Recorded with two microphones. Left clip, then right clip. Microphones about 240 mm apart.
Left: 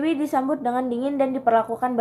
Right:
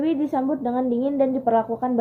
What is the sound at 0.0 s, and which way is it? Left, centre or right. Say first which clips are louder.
A woman's voice: even; centre.